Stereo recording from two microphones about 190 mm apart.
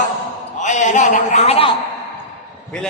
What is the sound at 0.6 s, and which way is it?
Speech, 40° left (ahead or behind).